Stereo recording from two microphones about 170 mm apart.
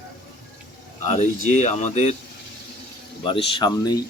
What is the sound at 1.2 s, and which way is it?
Speech, 45° left (ahead or behind).